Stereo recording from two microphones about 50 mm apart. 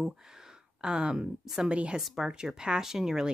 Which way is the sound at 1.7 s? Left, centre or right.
Right.